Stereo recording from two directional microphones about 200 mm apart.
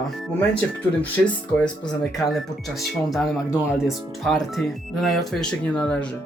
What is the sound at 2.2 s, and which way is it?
Speech, centre (ahead or behind).